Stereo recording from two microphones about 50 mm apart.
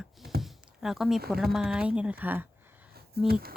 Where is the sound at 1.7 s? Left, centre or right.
Right.